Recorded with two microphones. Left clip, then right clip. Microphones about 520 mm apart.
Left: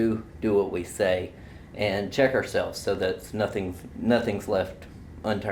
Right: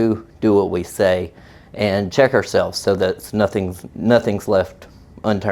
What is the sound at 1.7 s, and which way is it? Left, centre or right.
Speech, right.